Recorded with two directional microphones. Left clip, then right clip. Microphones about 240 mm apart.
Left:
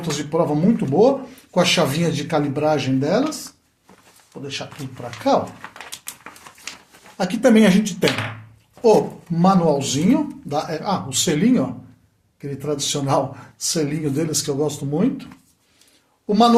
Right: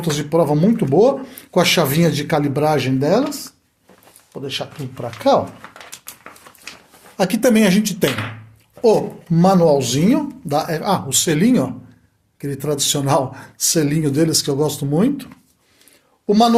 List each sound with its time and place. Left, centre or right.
0.0 s speech: right
4.3 s speech: right
7.2 s speech: right